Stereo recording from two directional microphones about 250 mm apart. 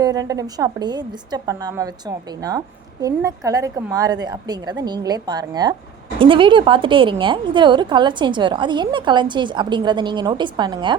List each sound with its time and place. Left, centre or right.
0.0 s a woman's voice: centre